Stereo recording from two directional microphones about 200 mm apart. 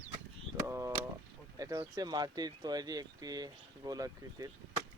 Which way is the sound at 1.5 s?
15° right (ahead or behind).